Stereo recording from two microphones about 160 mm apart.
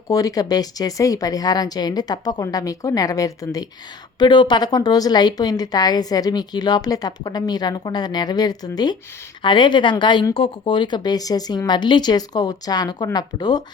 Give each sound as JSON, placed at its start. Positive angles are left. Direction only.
{"t": 0.1, "sound": "a woman's voice", "side_deg": 20}